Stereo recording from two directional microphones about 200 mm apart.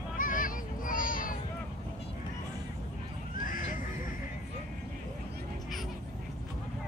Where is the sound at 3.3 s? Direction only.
40° left (ahead or behind).